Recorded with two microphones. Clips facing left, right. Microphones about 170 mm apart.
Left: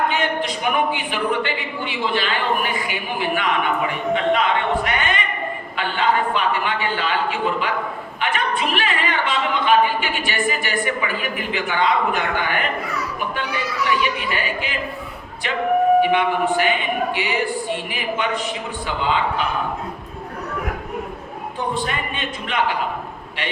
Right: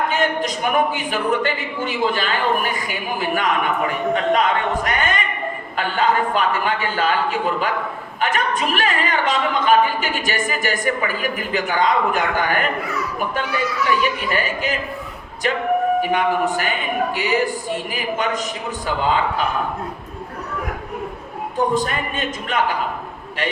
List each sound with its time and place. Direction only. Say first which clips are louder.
0.1 s speech: right 2 dB; 40° right (ahead or behind)
14.2 s speech: right 2 dB; 45° right (ahead or behind)
16.0 s a man's voice: left 1 dB; 40° right (ahead or behind)
21.8 s speech: right 2 dB; 45° right (ahead or behind)